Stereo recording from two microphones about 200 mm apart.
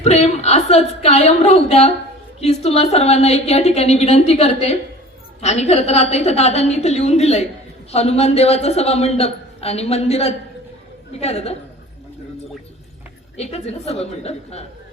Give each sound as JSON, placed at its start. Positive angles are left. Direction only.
{"t": 0.0, "sound": "a woman's voice", "side_deg": 30}
{"t": 13.3, "sound": "a woman's voice", "side_deg": 30}